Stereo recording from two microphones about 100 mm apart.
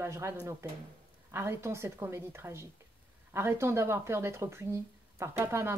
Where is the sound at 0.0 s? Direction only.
25° right (ahead or behind).